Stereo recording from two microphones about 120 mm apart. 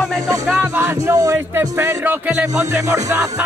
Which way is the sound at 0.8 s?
20° right (ahead or behind).